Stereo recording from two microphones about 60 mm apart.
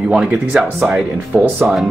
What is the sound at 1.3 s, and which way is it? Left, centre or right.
Speech, right.